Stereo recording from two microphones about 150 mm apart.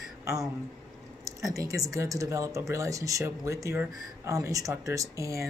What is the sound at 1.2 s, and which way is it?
Speech, 20° right (ahead or behind).